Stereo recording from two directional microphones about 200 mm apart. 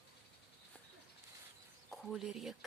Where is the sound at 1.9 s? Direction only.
Centre (ahead or behind).